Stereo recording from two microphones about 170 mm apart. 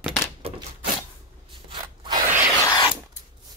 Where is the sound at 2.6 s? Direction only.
25° left (ahead or behind).